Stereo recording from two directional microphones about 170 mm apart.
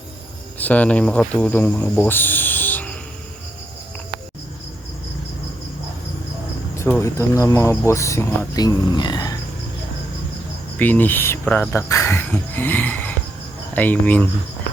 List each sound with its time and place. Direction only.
0.6 s speech: 10° left (ahead or behind)
6.7 s speech: 15° left (ahead or behind)
10.8 s speech: 10° left (ahead or behind)